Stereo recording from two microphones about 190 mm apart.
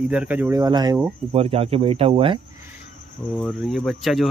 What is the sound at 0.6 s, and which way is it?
Speech, 20° right (ahead or behind).